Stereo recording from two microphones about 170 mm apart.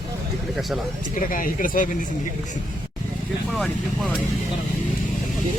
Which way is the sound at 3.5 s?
Centre (ahead or behind).